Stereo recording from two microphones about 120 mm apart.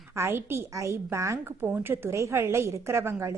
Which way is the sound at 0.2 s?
20° right (ahead or behind).